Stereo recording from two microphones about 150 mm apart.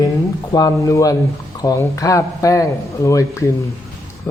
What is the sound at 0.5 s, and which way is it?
Speech, 20° left (ahead or behind).